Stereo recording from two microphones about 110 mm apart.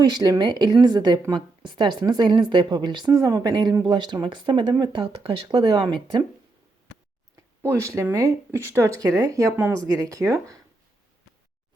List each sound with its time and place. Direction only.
0.2 s a woman's voice: 35° right (ahead or behind)
7.6 s speech: 25° right (ahead or behind)